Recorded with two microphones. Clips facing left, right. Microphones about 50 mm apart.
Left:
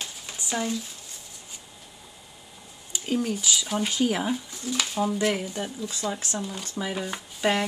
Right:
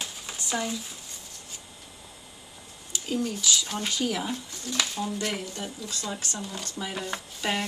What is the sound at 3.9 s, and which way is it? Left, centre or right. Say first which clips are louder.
Speech: left 4 dB; left.